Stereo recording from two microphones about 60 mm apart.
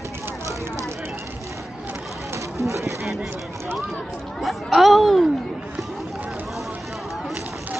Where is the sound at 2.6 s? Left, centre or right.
Right.